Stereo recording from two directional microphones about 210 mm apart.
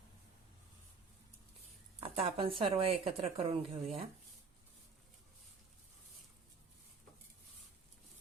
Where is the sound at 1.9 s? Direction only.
30° right (ahead or behind).